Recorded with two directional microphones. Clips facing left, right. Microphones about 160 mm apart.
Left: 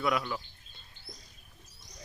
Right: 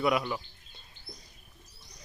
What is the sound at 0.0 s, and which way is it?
Speech, 15° right (ahead or behind).